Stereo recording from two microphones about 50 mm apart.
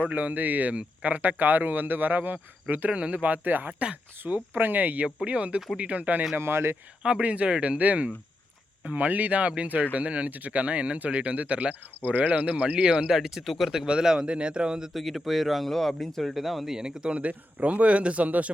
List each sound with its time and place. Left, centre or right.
0.1 s speech: right
2.9 s speech: right
6.3 s speech: right
7.2 s speech: right; by 13.8 s centre
13.8 s speech: centre
14.9 s speech: centre
16.7 s speech: centre